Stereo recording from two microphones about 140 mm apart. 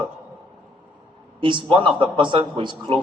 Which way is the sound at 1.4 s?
35° right (ahead or behind).